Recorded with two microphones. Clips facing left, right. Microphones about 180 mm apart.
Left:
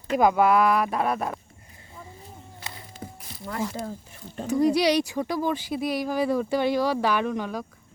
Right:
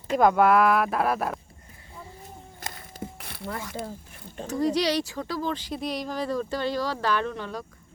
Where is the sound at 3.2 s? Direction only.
65° right (ahead or behind).